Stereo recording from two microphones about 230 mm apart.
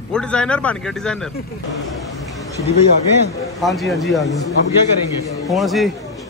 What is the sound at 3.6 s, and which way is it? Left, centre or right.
Speech, centre.